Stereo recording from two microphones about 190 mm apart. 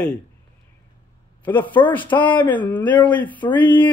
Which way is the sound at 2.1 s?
25° left (ahead or behind).